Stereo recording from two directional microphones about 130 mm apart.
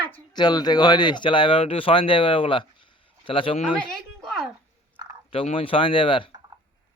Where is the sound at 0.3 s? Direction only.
35° left (ahead or behind).